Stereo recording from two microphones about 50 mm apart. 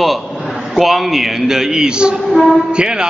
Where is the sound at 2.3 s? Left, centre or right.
Centre.